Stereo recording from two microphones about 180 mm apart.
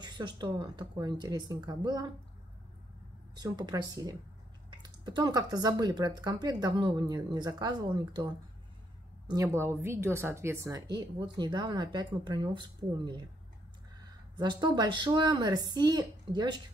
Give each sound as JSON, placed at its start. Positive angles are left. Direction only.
{"t": 0.0, "sound": "a woman's voice", "side_deg": -25}
{"t": 3.3, "sound": "a woman's voice", "side_deg": -20}
{"t": 9.3, "sound": "a woman's voice", "side_deg": -15}
{"t": 14.3, "sound": "a woman's voice", "side_deg": -25}